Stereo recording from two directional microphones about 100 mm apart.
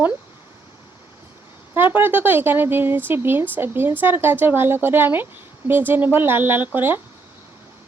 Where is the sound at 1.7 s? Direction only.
20° right (ahead or behind).